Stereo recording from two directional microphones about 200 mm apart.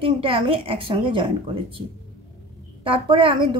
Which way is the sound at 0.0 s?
25° right (ahead or behind).